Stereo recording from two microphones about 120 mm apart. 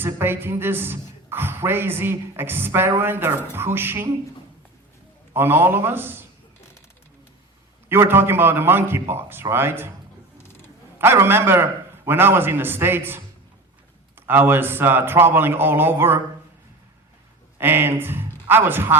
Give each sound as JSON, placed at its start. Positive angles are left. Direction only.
{"t": 0.0, "sound": "a woman's voice", "side_deg": -20}
{"t": 5.3, "sound": "a man's voice", "side_deg": -20}
{"t": 7.9, "sound": "a woman's voice", "side_deg": -20}
{"t": 10.4, "sound": "a sound", "side_deg": 20}
{"t": 10.9, "sound": "a woman's voice", "side_deg": -20}
{"t": 17.6, "sound": "a man's voice", "side_deg": -20}